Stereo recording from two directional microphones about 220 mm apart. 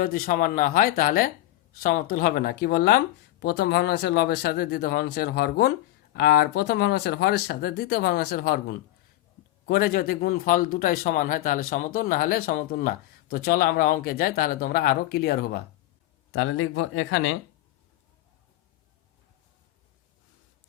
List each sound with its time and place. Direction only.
0.0 s a man's voice: 40° left (ahead or behind)
16.3 s speech: 70° left (ahead or behind)